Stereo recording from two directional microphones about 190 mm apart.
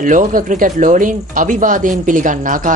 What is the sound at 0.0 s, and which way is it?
Speech, 45° right (ahead or behind).